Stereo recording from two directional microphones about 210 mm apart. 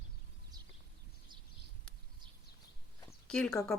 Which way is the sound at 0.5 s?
20° right (ahead or behind).